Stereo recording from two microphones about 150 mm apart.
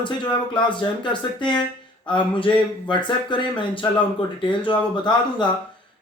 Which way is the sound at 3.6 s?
35° left (ahead or behind).